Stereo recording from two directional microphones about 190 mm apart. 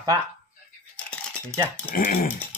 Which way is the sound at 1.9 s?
45° left (ahead or behind).